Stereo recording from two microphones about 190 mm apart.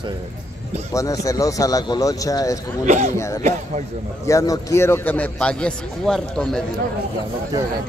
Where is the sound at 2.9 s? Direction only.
35° right (ahead or behind).